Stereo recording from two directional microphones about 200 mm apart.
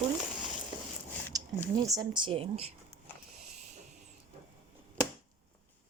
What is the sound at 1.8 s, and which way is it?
Speech, 20° right (ahead or behind).